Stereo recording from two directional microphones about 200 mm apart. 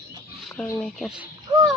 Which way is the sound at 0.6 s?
5° left (ahead or behind).